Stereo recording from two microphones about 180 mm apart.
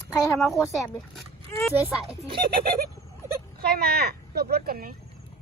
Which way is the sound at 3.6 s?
60° right (ahead or behind).